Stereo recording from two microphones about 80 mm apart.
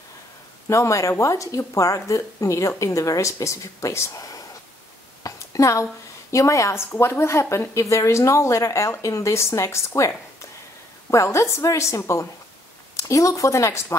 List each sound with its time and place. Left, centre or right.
0.7 s a woman's voice: left
5.2 s a sound: left
6.3 s a woman's voice: left